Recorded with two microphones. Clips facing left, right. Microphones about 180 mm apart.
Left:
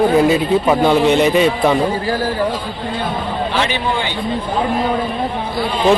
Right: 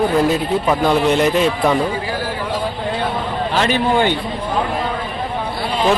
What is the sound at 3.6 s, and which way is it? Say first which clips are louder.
Speech: right 6 dB; 45° right (ahead or behind).